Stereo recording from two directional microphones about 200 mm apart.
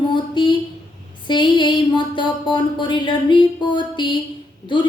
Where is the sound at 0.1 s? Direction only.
25° left (ahead or behind).